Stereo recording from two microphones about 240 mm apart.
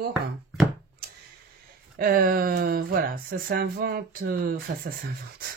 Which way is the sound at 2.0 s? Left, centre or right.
Right.